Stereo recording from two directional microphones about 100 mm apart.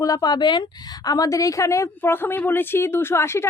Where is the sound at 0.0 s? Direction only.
40° left (ahead or behind).